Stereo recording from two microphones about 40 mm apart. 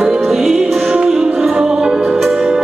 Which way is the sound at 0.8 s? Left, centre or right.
Right.